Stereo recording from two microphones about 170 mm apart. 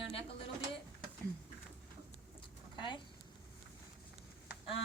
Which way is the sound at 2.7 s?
25° left (ahead or behind).